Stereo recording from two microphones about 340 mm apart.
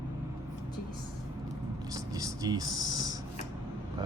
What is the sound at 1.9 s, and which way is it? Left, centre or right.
Writing, centre.